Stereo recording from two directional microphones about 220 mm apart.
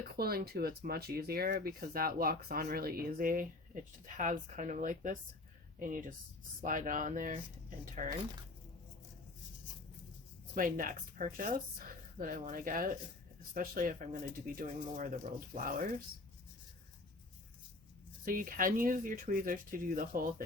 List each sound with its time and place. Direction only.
0.2 s speech: 45° right (ahead or behind)
10.5 s speech: 40° right (ahead or behind)
18.3 s speech: 40° right (ahead or behind)